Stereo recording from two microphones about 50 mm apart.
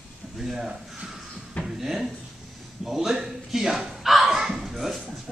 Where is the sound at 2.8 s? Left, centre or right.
Centre.